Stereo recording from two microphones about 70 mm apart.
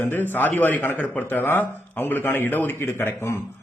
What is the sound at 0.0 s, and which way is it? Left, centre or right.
A man's voice, left.